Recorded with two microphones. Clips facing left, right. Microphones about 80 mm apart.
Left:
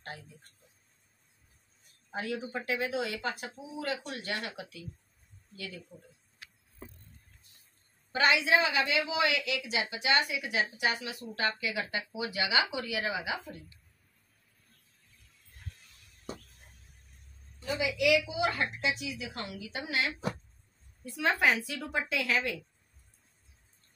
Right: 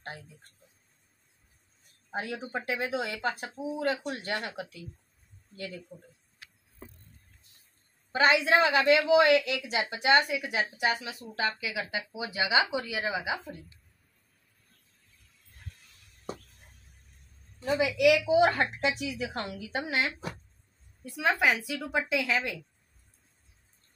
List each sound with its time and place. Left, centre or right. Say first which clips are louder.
2.0 s speech: even; right
5.9 s a woman's voice: right 4 dB; centre
8.1 s a woman's voice: right 3 dB; right
8.5 s a woman's voice: right 5 dB; right
11.4 s a woman's voice: even; centre
12.1 s speech: right 4 dB; right
17.6 s a woman's voice: right 5 dB; right
19.4 s a woman's voice: right 4 dB; right
21.0 s a woman's voice: right 1 dB; centre